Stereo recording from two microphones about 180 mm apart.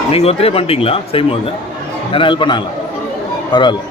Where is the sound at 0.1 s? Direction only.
35° left (ahead or behind).